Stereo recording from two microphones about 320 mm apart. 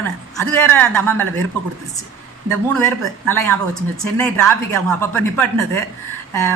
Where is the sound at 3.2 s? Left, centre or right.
Centre.